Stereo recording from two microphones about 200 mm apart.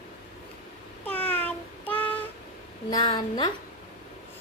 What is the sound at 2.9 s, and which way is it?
Speech, 20° left (ahead or behind).